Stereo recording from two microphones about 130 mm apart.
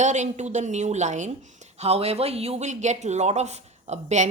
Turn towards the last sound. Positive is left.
turn(degrees=-65)  # may be behind; listen again after turning